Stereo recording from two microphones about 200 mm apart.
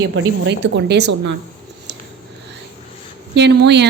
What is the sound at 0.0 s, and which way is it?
A woman's voice, 70° right (ahead or behind).